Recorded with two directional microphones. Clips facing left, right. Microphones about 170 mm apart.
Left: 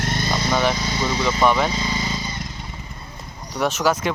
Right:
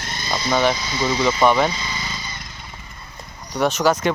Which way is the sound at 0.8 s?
50° left (ahead or behind).